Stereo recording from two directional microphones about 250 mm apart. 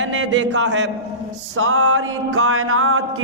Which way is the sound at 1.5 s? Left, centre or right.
Right.